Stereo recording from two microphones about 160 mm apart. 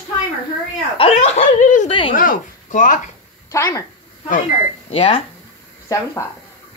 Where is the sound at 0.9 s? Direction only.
35° left (ahead or behind).